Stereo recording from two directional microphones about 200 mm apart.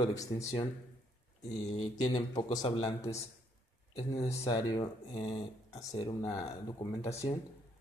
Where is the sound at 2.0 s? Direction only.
20° left (ahead or behind).